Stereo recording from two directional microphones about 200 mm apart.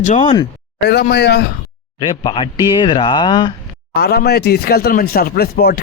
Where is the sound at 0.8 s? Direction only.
55° left (ahead or behind).